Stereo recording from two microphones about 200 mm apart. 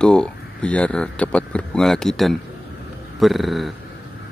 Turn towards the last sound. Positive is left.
turn(degrees=0)  # may be behind; listen again after turning